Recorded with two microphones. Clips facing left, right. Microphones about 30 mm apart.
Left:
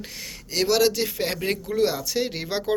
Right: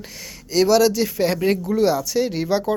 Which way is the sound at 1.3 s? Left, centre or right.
Centre.